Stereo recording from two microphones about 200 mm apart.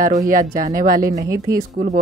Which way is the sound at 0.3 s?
45° right (ahead or behind).